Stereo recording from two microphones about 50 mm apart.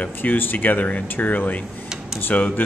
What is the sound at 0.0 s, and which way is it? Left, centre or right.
Speech, left.